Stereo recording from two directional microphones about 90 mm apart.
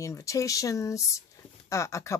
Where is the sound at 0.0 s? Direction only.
35° left (ahead or behind).